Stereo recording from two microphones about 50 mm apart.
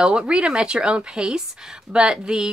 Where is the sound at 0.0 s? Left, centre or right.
Centre.